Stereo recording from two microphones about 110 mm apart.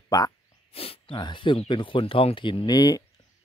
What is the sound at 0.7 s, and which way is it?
Speech, 60° left (ahead or behind).